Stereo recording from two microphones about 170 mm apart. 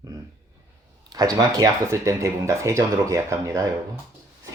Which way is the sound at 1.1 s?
20° right (ahead or behind).